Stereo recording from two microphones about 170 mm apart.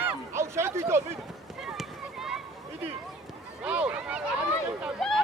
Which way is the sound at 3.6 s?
5° right (ahead or behind).